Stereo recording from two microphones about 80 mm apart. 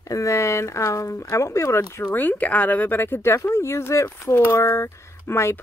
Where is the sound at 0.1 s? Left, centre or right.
Left.